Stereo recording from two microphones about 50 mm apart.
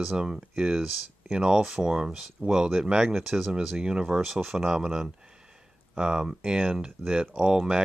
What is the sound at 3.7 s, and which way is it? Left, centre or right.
Speech, centre.